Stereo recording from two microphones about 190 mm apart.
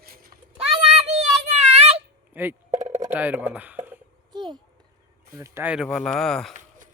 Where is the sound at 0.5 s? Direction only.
30° right (ahead or behind).